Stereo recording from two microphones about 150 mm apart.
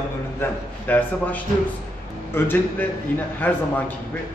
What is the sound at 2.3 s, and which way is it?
A man's voice, 15° left (ahead or behind).